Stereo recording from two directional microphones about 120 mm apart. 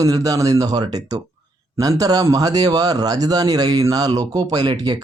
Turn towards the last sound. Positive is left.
turn(degrees=-35)  # may be behind; listen again after turning